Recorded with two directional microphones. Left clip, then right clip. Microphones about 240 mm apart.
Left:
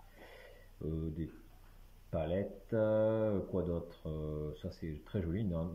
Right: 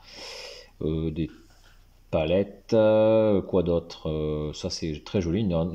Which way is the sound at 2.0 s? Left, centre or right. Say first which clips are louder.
Right 13 dB; right.